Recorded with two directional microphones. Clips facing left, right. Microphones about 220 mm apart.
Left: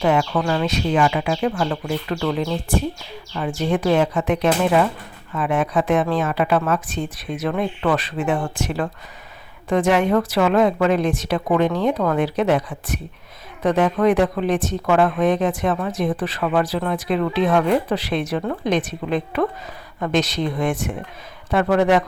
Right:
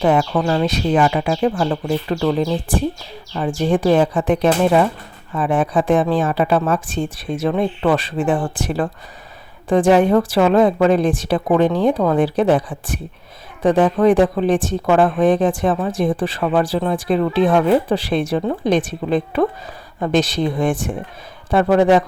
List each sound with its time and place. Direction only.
0.0 s speech: 35° right (ahead or behind)